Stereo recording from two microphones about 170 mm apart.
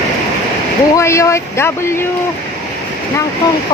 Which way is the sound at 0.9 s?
15° left (ahead or behind).